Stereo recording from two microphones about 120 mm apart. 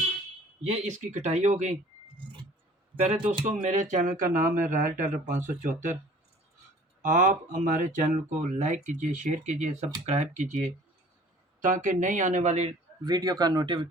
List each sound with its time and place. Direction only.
0.7 s speech: 80° right
2.9 s speech: 50° right (ahead or behind)
3.4 s speech: 80° right
7.0 s speech: 90° right; by 12.7 s 65° right (ahead or behind)
13.1 s speech: 30° right (ahead or behind)